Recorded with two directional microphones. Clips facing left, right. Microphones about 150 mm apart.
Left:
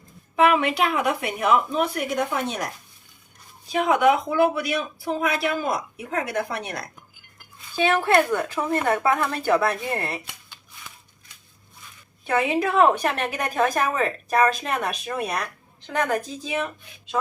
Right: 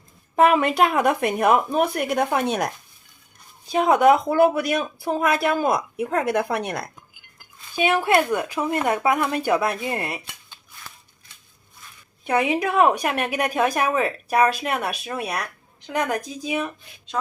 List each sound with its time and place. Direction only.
0.3 s speech: 40° right (ahead or behind); by 2.6 s 60° right (ahead or behind)
3.7 s speech: 35° right (ahead or behind); by 6.8 s 55° right (ahead or behind)
7.8 s a woman's voice: 15° right (ahead or behind)
12.2 s a woman's voice: 15° right (ahead or behind)